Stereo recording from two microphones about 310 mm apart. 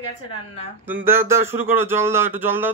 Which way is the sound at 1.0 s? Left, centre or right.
Centre.